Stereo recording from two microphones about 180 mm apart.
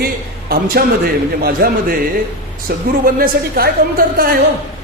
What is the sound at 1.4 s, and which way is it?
A woman's voice, 55° right (ahead or behind).